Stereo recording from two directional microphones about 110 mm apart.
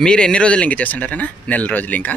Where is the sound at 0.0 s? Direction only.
10° left (ahead or behind).